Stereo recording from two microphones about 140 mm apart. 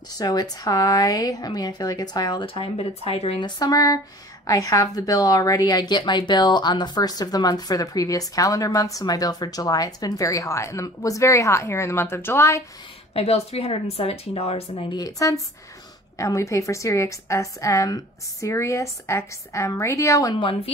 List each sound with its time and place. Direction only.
0.1 s a woman's voice: 30° left (ahead or behind); by 3.4 s 45° left (ahead or behind)
3.4 s a woman's voice: 30° left (ahead or behind)
13.1 s speech: 45° left (ahead or behind)
14.9 s a woman's voice: 25° left (ahead or behind)
20.3 s a woman's voice: 40° left (ahead or behind)